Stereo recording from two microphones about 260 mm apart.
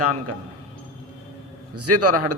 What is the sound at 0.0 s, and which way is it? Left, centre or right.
Speech, right.